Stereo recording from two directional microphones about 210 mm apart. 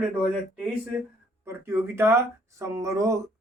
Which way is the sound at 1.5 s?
10° right (ahead or behind).